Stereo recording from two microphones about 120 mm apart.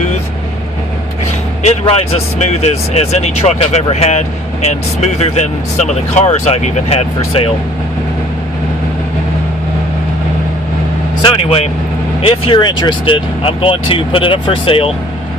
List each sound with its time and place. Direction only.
1.9 s speech: 60° left (ahead or behind)
11.2 s speech: 50° left (ahead or behind)